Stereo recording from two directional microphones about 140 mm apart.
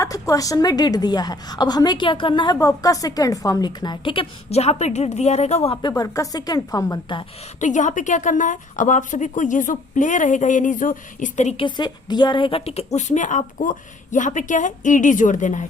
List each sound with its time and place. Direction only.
0.0 s a woman's voice: 25° left (ahead or behind); by 5.7 s 50° left (ahead or behind)
6.0 s a woman's voice: 25° left (ahead or behind)
7.6 s a woman's voice: 60° left (ahead or behind)
11.5 s a woman's voice: 35° left (ahead or behind); by 15.6 s 65° left (ahead or behind)